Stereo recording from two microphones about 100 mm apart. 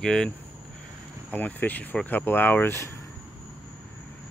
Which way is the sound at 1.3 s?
15° left (ahead or behind).